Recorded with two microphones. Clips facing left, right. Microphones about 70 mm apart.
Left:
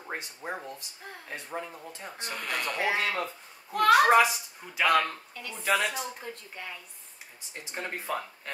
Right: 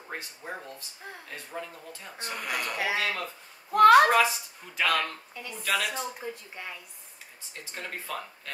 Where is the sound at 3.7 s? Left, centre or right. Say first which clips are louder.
Right 4 dB; right.